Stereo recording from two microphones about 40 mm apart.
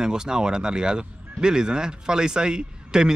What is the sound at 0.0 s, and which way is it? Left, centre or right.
Speech, centre.